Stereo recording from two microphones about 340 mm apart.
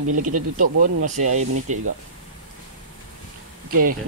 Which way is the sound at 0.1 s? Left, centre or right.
Right.